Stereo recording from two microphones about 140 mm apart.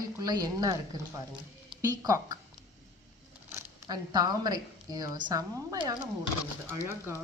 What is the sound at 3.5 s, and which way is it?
Speech, 25° right (ahead or behind).